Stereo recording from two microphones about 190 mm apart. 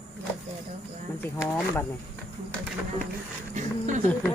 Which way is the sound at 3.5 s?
40° right (ahead or behind).